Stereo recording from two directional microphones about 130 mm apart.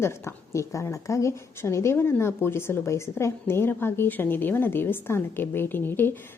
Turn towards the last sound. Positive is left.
turn(degrees=15)  # may be behind; listen again after turning